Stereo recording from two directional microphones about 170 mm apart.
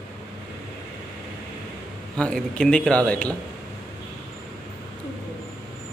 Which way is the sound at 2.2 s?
5° left (ahead or behind).